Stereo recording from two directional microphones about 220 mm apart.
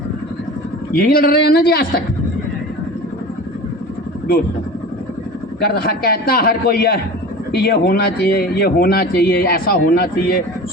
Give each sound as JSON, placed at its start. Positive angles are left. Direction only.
{"t": 0.9, "sound": "a man's voice", "side_deg": 40}
{"t": 5.5, "sound": "a man's voice", "side_deg": 45}